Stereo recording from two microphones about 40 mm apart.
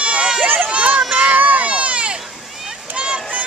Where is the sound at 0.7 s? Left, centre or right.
Right.